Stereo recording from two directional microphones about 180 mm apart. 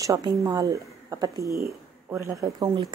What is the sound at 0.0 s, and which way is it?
Speech, 20° right (ahead or behind).